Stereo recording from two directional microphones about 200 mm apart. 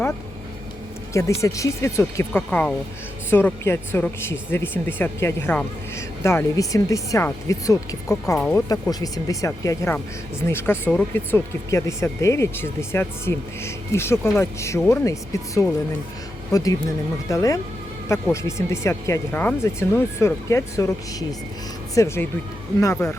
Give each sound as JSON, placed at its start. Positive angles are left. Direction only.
{"t": 1.1, "sound": "speech", "side_deg": 15}